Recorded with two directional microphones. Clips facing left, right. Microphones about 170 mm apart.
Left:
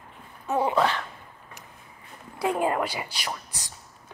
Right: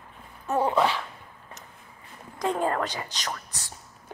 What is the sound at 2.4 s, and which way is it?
Whispering, 10° left (ahead or behind).